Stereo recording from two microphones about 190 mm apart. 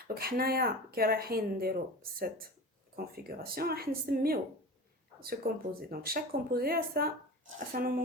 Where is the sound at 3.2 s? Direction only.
50° right (ahead or behind).